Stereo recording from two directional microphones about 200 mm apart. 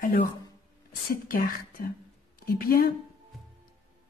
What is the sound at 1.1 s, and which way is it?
Speech, 45° left (ahead or behind).